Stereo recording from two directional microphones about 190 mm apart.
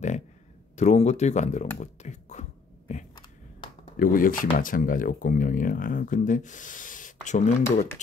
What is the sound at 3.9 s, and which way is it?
Speech, 45° left (ahead or behind).